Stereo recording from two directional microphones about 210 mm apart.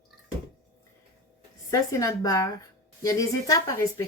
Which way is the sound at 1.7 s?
15° left (ahead or behind).